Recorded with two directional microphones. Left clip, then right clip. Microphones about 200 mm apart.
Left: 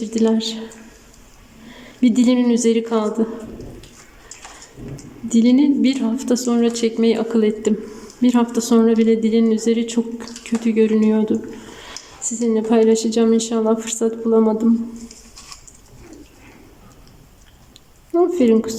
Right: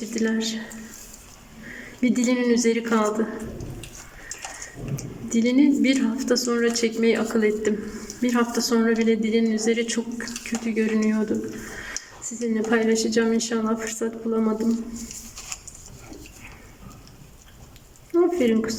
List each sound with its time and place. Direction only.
0.1 s a woman's voice: 15° left (ahead or behind)
2.0 s a woman's voice: 15° left (ahead or behind)
5.3 s a woman's voice: 15° left (ahead or behind)
18.1 s a sound: 20° left (ahead or behind)